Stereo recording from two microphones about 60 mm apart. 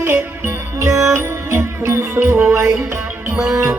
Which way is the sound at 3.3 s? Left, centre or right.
Centre.